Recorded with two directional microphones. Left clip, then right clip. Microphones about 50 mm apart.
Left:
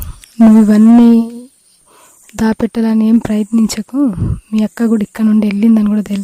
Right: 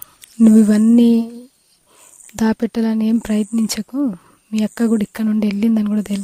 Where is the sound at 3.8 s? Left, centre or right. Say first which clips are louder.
Left 6 dB; centre.